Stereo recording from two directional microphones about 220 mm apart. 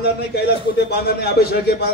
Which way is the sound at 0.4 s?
45° left (ahead or behind).